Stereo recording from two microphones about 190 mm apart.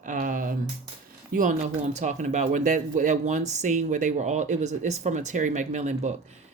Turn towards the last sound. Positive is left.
turn(degrees=-40)  # may be behind; listen again after turning